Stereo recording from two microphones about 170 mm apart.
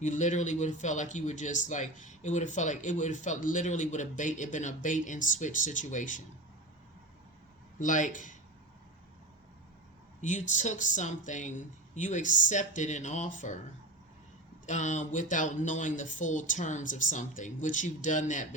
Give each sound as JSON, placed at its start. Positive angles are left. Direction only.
{"t": 0.0, "sound": "speech", "side_deg": 45}
{"t": 7.8, "sound": "speech", "side_deg": 50}
{"t": 10.2, "sound": "speech", "side_deg": 45}
{"t": 14.7, "sound": "speech", "side_deg": 45}